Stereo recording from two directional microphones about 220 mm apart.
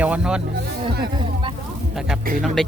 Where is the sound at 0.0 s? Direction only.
5° right (ahead or behind).